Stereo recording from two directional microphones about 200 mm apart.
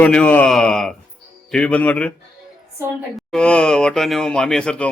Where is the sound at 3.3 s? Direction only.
5° left (ahead or behind).